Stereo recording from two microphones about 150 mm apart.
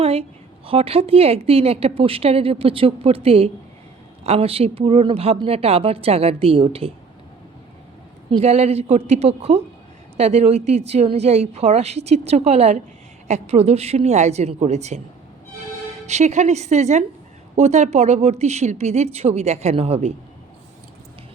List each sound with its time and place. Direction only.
0.0 s a woman's voice: 40° right (ahead or behind)
8.3 s a woman's voice: 45° right (ahead or behind)
16.0 s a woman's voice: 50° right (ahead or behind)